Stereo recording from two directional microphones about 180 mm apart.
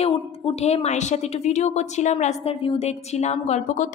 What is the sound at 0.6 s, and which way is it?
A woman's voice, 35° left (ahead or behind).